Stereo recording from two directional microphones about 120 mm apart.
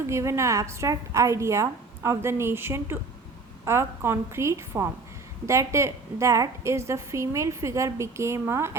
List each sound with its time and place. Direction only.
0.1 s a woman's voice: 25° right (ahead or behind)